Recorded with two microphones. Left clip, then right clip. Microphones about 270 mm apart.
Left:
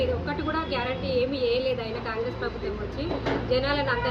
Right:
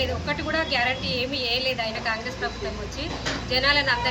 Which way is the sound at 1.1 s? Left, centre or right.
Centre.